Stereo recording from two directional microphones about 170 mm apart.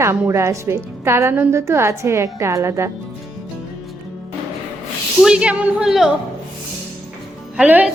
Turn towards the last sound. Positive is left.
turn(degrees=-10)  # may be behind; listen again after turning